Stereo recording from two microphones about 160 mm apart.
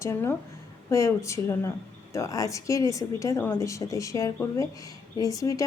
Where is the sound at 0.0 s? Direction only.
15° left (ahead or behind).